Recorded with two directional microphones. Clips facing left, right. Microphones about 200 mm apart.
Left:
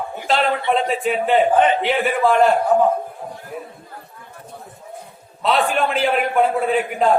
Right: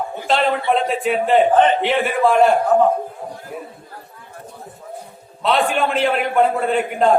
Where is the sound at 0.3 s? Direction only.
Centre (ahead or behind).